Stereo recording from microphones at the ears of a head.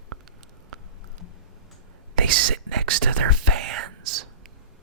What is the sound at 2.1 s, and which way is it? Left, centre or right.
Whispering, right.